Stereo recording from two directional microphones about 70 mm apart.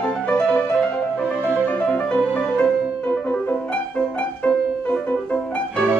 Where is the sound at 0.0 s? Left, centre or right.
Centre.